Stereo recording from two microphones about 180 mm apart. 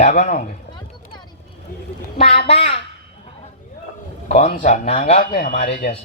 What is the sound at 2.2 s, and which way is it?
Speech, 30° left (ahead or behind).